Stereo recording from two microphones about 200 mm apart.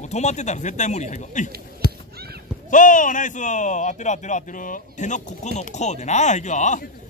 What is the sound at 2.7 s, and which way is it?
A man's voice, 40° left (ahead or behind).